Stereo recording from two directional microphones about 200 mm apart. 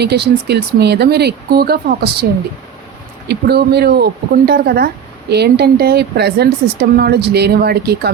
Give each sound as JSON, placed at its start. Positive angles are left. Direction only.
{"t": 0.0, "sound": "speech", "side_deg": -55}
{"t": 3.2, "sound": "speech", "side_deg": -55}